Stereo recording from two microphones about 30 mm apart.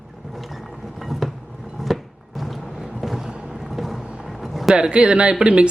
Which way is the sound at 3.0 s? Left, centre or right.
Centre.